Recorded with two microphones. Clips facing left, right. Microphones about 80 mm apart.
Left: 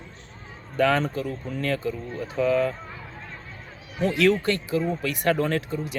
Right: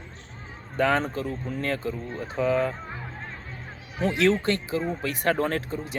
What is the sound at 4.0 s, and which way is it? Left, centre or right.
Speech, right.